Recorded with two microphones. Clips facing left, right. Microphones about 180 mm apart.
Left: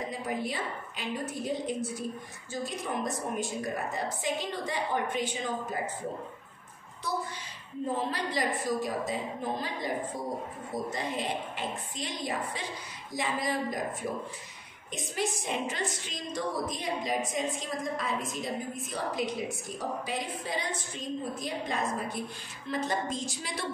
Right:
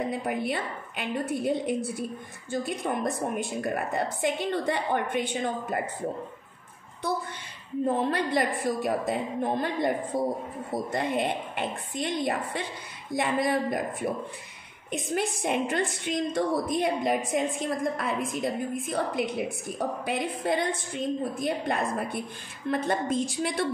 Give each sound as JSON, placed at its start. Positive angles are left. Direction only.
{"t": 0.1, "sound": "a woman's voice", "side_deg": -60}
{"t": 7.8, "sound": "a woman's voice", "side_deg": -60}
{"t": 14.9, "sound": "a woman's voice", "side_deg": -60}